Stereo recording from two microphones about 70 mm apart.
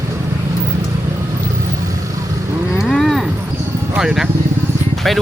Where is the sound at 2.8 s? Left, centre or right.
Centre.